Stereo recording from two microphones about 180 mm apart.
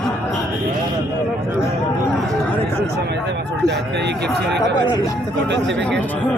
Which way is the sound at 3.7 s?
70° right (ahead or behind).